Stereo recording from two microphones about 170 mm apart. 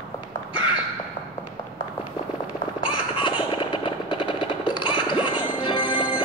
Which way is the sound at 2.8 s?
30° left (ahead or behind).